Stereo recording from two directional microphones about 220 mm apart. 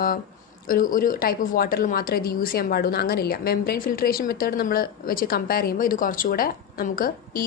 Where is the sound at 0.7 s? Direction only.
40° left (ahead or behind).